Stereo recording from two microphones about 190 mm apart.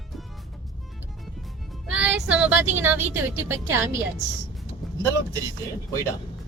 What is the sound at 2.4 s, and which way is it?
A woman's voice, 10° right (ahead or behind).